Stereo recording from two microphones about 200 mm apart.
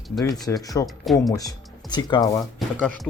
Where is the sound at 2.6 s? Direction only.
Centre (ahead or behind).